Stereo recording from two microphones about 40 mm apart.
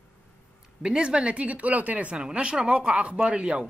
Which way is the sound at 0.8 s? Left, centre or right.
Right.